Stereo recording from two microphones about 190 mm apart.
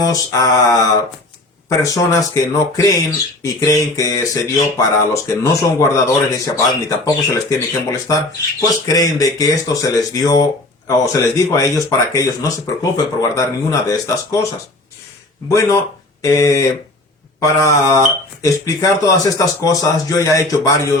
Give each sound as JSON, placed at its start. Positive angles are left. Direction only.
{"t": 0.0, "sound": "mantra", "side_deg": 20}
{"t": 1.8, "sound": "speech", "side_deg": 15}
{"t": 15.4, "sound": "speech", "side_deg": 15}